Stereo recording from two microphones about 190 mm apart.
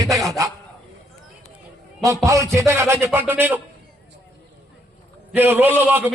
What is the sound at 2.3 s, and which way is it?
A man's voice, 15° right (ahead or behind).